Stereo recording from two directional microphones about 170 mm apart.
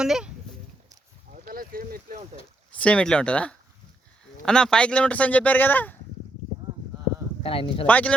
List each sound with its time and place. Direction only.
0.0 s speech: 5° right (ahead or behind)
1.3 s a sound: 50° right (ahead or behind)
2.7 s speech: 5° left (ahead or behind)
7.4 s speech: 35° left (ahead or behind)
7.9 s speech: 10° left (ahead or behind)